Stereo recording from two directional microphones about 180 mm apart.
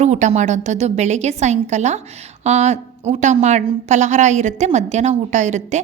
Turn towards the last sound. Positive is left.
turn(degrees=-40)  # may be behind; listen again after turning